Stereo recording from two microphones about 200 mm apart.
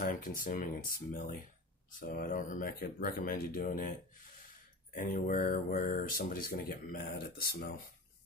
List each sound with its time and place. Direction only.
0.0 s speech: 40° left (ahead or behind)
4.9 s speech: 45° left (ahead or behind)